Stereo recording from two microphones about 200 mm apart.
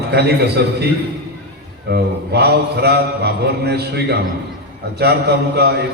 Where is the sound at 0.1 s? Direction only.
55° right (ahead or behind).